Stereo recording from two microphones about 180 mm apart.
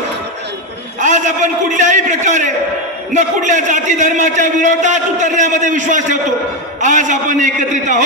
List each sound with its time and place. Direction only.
1.0 s a man's voice: 45° right (ahead or behind)